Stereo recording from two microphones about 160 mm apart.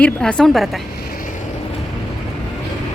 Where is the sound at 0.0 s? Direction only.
5° left (ahead or behind).